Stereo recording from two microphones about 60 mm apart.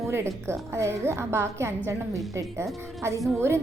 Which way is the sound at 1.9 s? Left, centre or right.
Right.